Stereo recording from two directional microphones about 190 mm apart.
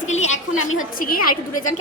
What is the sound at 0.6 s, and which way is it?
Speech, 90° left.